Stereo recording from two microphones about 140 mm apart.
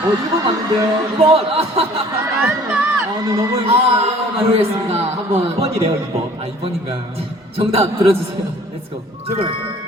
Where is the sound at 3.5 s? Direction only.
45° right (ahead or behind).